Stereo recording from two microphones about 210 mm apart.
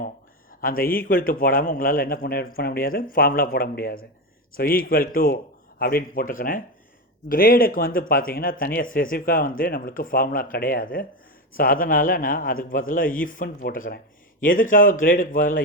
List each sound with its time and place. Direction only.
0.6 s a man's voice: 45° left (ahead or behind)